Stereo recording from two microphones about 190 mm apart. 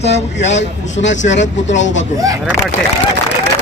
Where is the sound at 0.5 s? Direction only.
75° left (ahead or behind).